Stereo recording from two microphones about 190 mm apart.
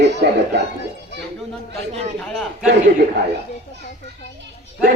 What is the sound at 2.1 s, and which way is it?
Speech, 5° left (ahead or behind).